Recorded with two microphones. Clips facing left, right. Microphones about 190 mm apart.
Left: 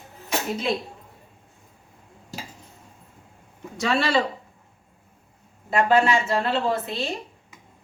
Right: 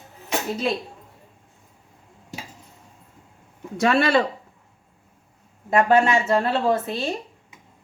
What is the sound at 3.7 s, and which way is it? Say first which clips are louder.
Speech: right 4 dB; 55° right (ahead or behind).